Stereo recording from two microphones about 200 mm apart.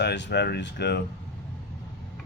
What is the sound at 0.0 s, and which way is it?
Speech, 60° left (ahead or behind).